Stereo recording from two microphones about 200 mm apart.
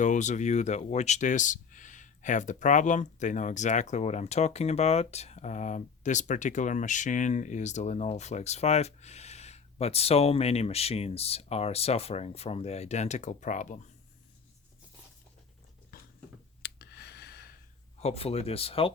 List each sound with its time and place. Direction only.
0.0 s speech: 35° left (ahead or behind)
15.9 s a sound: 50° left (ahead or behind)
18.0 s speech: 30° left (ahead or behind)